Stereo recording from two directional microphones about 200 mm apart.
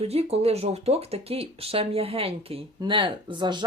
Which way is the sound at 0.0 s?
30° right (ahead or behind).